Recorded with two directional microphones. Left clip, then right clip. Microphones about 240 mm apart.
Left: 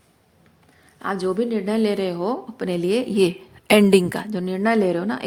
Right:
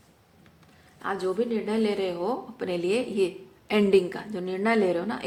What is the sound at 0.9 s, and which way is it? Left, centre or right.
A woman's voice, left.